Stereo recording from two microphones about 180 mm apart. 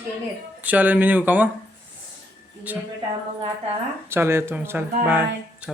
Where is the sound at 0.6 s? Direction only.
10° right (ahead or behind).